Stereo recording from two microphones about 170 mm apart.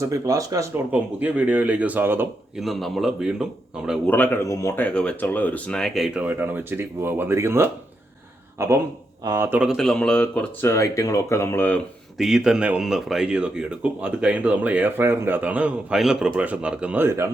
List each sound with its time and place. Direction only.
0.0 s speech: 20° right (ahead or behind)
0.9 s speech: 10° right (ahead or behind)
2.6 s speech: centre (ahead or behind)
4.0 s speech: 10° left (ahead or behind)
12.1 s speech: centre (ahead or behind)